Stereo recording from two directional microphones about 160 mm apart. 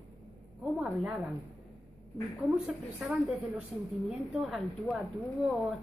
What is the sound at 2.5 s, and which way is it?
A woman's voice, 5° right (ahead or behind).